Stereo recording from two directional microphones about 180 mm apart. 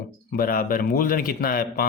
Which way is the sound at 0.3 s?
55° left (ahead or behind).